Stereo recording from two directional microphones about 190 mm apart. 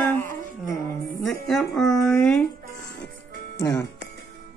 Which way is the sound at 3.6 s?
20° left (ahead or behind).